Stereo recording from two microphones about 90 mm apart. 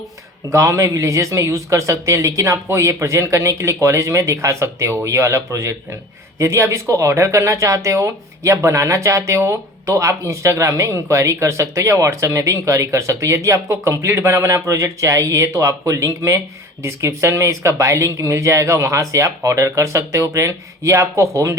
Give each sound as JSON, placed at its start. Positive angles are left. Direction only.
{"t": 0.5, "sound": "speech", "side_deg": -35}